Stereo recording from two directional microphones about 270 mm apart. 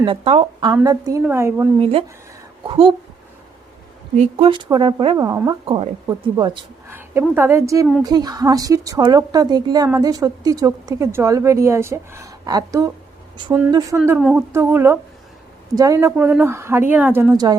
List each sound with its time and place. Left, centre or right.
0.0 s a woman's voice: right
1.8 s a woman's voice: right
4.2 s a woman's voice: right